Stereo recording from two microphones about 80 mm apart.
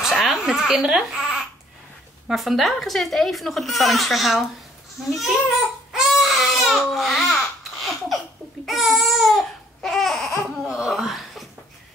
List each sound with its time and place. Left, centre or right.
0.2 s speech: centre
5.9 s baby cry: centre
10.2 s laughter: left
10.5 s laughter: centre
10.8 s gasp: centre